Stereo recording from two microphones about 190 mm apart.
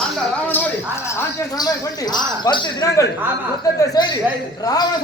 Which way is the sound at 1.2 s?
20° left (ahead or behind).